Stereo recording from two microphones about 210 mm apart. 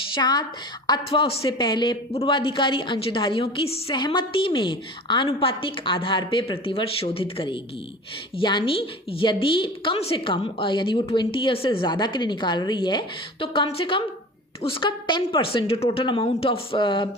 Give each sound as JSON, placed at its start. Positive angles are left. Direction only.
{"t": 0.1, "sound": "a woman's voice", "side_deg": 20}